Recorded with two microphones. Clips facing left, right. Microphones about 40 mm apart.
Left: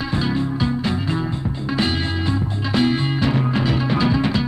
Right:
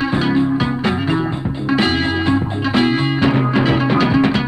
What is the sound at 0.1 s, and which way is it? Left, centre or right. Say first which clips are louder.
Music: right 4 dB; right.